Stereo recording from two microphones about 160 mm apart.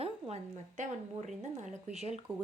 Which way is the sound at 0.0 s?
40° right (ahead or behind).